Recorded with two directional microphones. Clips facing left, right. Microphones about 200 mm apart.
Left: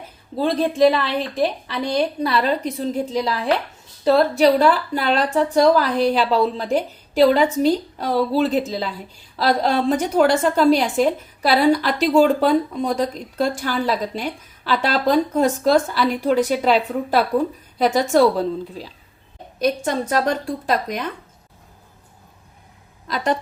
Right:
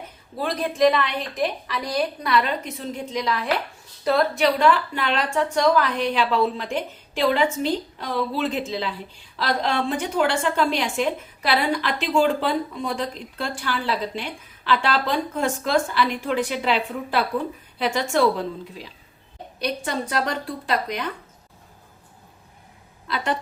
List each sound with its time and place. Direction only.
0.3 s a woman's voice: 25° left (ahead or behind); by 21.0 s 45° left (ahead or behind)
23.0 s a woman's voice: 40° left (ahead or behind)